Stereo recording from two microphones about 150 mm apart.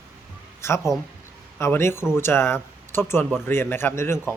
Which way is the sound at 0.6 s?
20° left (ahead or behind).